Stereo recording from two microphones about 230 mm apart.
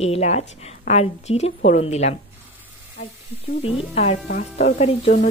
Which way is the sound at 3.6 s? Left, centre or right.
Left.